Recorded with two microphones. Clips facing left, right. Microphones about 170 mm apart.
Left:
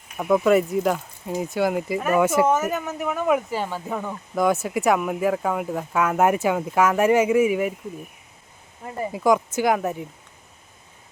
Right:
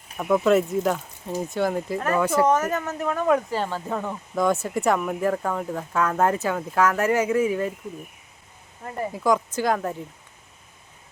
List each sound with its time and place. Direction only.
0.2 s speech: 5° left (ahead or behind)
8.8 s speech: 15° left (ahead or behind)